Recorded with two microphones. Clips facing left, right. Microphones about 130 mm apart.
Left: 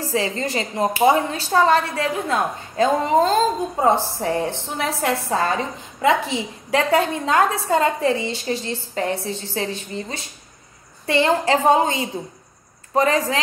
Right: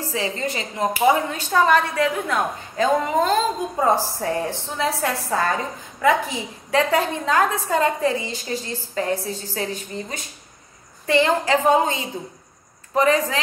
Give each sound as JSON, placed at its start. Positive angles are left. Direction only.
{"t": 0.0, "sound": "a woman's voice", "side_deg": 35}
{"t": 12.9, "sound": "a woman's voice", "side_deg": 30}